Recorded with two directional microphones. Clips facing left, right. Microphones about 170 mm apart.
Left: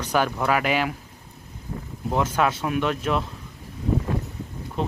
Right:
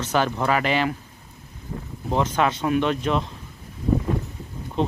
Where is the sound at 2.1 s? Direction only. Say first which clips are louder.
Right 1 dB; 5° left (ahead or behind).